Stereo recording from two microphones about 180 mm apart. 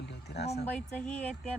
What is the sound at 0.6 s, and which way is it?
Speech, 5° left (ahead or behind).